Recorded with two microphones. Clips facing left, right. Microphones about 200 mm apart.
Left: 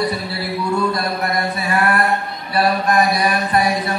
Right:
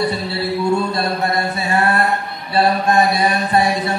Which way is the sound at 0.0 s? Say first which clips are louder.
Right 2 dB; 25° right (ahead or behind).